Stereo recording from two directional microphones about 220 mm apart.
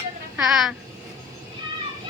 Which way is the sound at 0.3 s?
Centre (ahead or behind).